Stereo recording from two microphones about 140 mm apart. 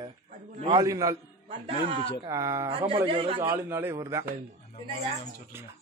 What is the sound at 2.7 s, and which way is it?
Speech, 40° right (ahead or behind).